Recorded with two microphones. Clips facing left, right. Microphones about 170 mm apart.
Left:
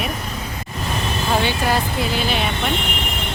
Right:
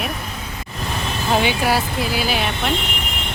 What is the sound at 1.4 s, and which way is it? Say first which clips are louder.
Speech: right 1 dB; 10° right (ahead or behind).